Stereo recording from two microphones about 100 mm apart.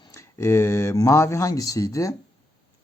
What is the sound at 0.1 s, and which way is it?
Speech, 25° left (ahead or behind).